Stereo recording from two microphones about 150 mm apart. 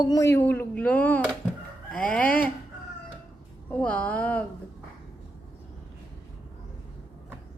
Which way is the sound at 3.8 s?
10° left (ahead or behind).